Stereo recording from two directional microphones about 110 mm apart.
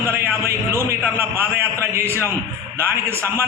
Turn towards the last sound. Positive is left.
turn(degrees=-25)  # may be behind; listen again after turning